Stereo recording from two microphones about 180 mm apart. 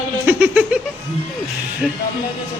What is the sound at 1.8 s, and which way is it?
Speech, centre (ahead or behind).